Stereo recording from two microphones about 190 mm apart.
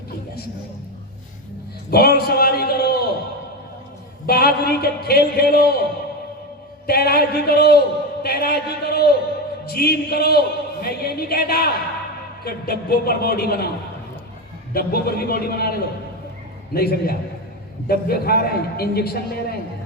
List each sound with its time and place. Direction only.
1.9 s a sound: 55° left (ahead or behind)
4.3 s a man's voice: 55° left (ahead or behind)
6.8 s a man's voice: 55° left (ahead or behind)
14.7 s a man's voice: 55° left (ahead or behind)